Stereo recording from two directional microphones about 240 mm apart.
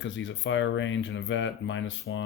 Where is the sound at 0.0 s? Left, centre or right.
Left.